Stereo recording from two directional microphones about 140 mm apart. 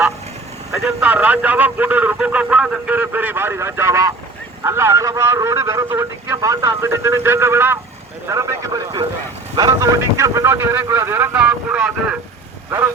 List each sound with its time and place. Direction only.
0.7 s a man's voice: 10° right (ahead or behind)